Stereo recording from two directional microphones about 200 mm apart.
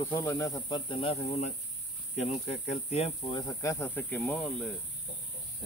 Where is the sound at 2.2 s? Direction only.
35° left (ahead or behind).